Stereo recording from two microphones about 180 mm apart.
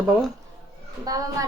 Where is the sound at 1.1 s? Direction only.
20° right (ahead or behind).